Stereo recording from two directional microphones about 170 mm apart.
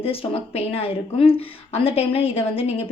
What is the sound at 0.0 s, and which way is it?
A woman's voice, 35° left (ahead or behind).